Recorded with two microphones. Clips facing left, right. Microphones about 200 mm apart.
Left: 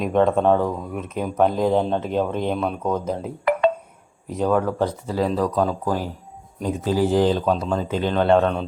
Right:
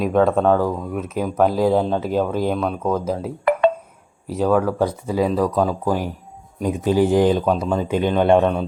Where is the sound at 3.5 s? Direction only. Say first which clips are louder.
Right 2 dB; 55° right (ahead or behind).